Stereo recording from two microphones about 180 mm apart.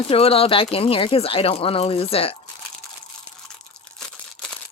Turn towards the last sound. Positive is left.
turn(degrees=5)  # may be behind; listen again after turning